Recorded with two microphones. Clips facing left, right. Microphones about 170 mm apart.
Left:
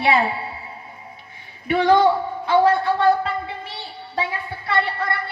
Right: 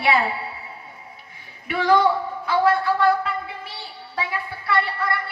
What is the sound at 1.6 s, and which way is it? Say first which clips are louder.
Speech: left 3 dB; 25° left (ahead or behind).